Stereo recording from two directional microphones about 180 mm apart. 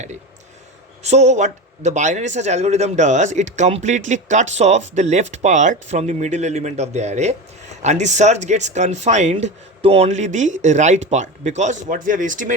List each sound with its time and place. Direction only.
1.0 s speech: 40° right (ahead or behind)